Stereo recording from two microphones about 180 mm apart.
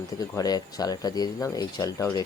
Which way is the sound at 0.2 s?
20° left (ahead or behind).